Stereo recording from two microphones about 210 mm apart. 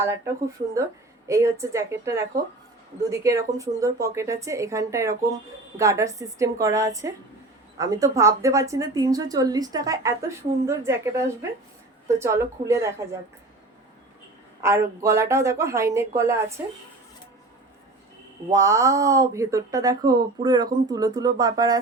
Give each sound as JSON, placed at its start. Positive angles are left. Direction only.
{"t": 1.3, "sound": "a woman's voice", "side_deg": -15}
{"t": 14.6, "sound": "a woman's voice", "side_deg": -15}
{"t": 18.5, "sound": "a woman's voice", "side_deg": -15}